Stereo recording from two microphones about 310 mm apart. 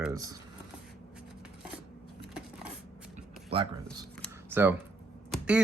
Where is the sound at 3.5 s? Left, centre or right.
Centre.